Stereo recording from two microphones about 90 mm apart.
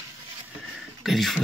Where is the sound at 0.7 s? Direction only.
Centre (ahead or behind).